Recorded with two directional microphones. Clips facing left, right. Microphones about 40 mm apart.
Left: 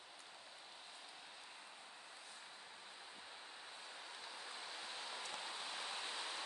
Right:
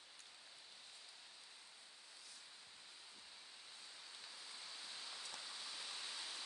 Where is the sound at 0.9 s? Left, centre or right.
Left.